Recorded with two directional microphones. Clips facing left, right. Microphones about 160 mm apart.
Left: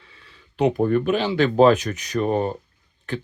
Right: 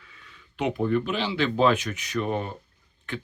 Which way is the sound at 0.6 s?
45° left (ahead or behind).